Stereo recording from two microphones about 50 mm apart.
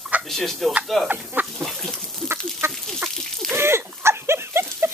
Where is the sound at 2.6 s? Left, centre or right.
Right.